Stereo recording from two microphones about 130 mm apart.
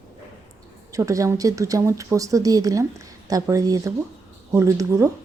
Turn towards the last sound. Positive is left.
turn(degrees=-25)  # may be behind; listen again after turning